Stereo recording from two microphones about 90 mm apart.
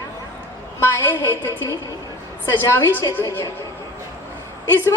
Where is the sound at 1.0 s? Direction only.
25° left (ahead or behind).